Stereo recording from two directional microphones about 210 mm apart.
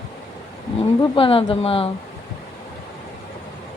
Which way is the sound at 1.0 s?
25° left (ahead or behind).